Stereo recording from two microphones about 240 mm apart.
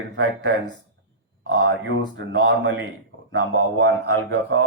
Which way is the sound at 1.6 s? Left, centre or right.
Right.